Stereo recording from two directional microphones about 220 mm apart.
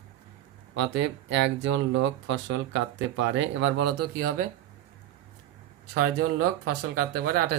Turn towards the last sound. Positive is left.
turn(degrees=-45)  # may be behind; listen again after turning